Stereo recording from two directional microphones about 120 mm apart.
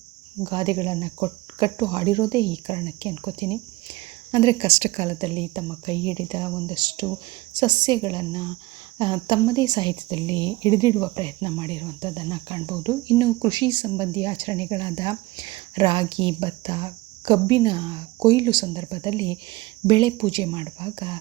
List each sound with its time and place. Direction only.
0.4 s speech: 40° right (ahead or behind); by 5.1 s 70° right (ahead or behind)
5.2 s speech: 45° right (ahead or behind)